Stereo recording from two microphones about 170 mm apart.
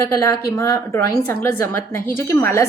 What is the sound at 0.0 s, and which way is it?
A woman's voice, 15° left (ahead or behind).